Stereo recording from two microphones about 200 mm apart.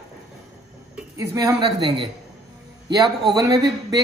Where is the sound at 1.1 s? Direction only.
15° right (ahead or behind).